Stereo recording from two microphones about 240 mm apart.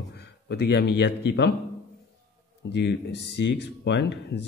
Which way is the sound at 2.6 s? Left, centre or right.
Left.